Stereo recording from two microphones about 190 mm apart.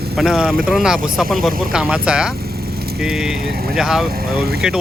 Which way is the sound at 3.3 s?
55° right (ahead or behind).